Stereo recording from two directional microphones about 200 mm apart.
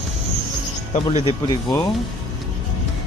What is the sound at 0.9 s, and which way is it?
Speech, 35° left (ahead or behind).